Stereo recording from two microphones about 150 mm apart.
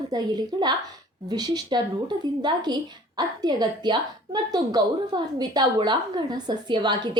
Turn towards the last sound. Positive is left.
turn(degrees=-30)  # may be behind; listen again after turning